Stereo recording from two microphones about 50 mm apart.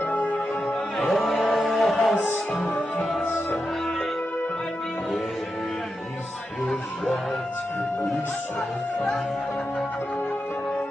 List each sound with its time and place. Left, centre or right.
0.0 s music: left
0.9 s a sound: centre
2.5 s music: centre